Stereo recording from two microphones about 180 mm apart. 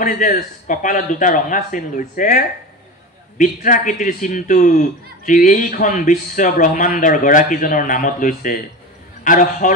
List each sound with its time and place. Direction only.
0.0 s a man's voice: 45° left (ahead or behind)